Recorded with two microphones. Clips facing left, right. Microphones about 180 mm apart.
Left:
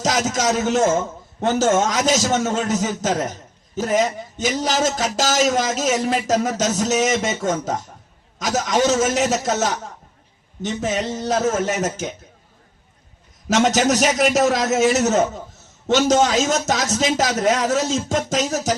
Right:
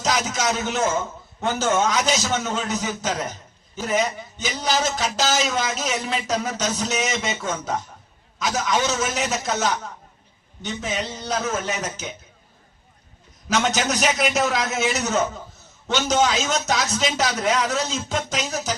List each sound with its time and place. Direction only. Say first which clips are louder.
0.0 s speech: left 3 dB; 45° left (ahead or behind)
13.5 s speech: left 6 dB; 45° left (ahead or behind)